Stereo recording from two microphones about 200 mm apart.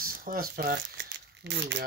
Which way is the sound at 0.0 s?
45° right (ahead or behind).